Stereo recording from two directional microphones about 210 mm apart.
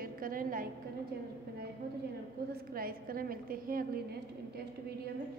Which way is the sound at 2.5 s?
45° right (ahead or behind).